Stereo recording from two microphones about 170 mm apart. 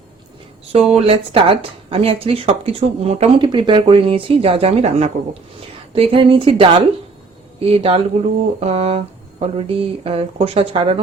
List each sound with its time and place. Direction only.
0.7 s speech: 40° right (ahead or behind)